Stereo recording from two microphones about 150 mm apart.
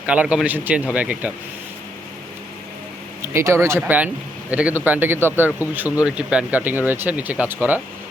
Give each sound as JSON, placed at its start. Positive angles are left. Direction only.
{"t": 0.0, "sound": "speech", "side_deg": -10}
{"t": 3.2, "sound": "speech", "side_deg": -15}